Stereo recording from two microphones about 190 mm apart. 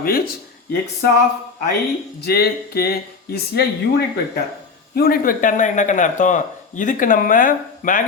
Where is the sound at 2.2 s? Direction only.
55° left (ahead or behind).